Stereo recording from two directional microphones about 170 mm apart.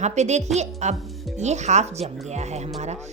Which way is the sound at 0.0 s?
40° right (ahead or behind).